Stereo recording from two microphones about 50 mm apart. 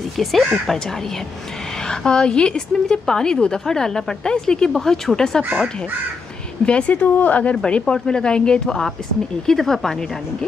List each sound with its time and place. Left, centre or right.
0.2 s speech: centre
1.9 s speech: centre
6.6 s speech: left